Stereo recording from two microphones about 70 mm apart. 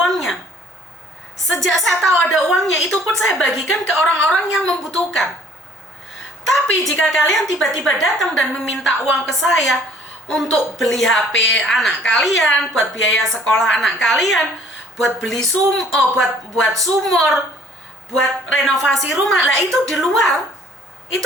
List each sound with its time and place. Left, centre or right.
0.0 s a sound: centre
1.5 s a woman's voice: centre
6.5 s a woman's voice: centre